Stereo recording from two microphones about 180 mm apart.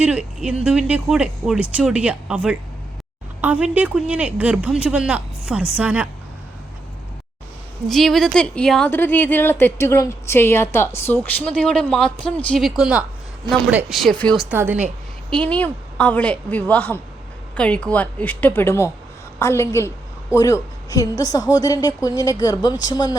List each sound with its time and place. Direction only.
0.0 s speech: 5° right (ahead or behind)
7.9 s a woman's voice: centre (ahead or behind)
14.5 s speech: 10° right (ahead or behind)
15.3 s a woman's voice: 5° left (ahead or behind); by 23.1 s 20° left (ahead or behind)